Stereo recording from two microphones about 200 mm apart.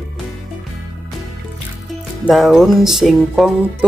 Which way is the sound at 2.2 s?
Centre (ahead or behind).